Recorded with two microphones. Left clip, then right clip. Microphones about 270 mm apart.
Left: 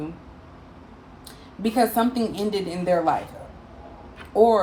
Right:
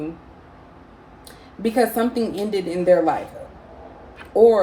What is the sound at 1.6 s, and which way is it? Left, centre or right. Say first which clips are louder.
Speech: right 2 dB; centre.